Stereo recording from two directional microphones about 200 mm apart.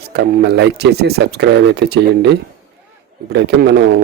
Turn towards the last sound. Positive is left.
turn(degrees=-55)  # may be behind; listen again after turning